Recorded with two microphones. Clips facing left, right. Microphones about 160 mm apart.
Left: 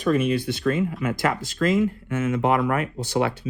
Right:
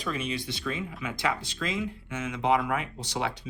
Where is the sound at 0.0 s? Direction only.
50° left (ahead or behind).